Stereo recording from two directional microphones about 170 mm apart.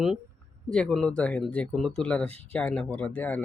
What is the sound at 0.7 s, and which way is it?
Speech, 5° left (ahead or behind).